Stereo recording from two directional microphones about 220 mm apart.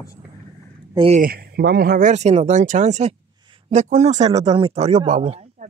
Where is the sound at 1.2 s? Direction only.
45° right (ahead or behind); by 5.7 s 30° right (ahead or behind).